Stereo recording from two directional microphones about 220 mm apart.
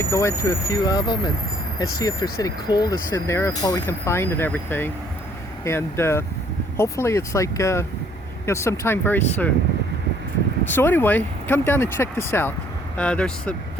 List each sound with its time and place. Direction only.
0.0 s speech: 10° left (ahead or behind)
10.8 s speech: 10° left (ahead or behind)